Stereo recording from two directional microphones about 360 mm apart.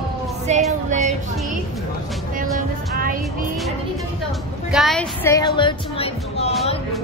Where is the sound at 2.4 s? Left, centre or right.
Right.